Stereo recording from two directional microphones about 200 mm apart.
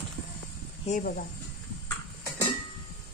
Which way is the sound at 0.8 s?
40° left (ahead or behind).